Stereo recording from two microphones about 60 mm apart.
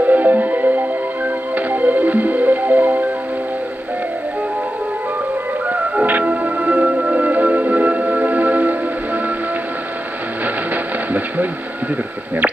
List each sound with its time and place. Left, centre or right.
0.0 s music: right
5.7 s music: right